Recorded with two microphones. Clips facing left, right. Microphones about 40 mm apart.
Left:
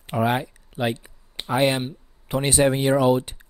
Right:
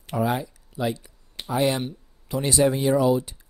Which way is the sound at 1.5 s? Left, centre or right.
Left.